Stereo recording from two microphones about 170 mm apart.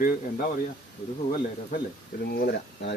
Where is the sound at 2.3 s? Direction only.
65° left (ahead or behind).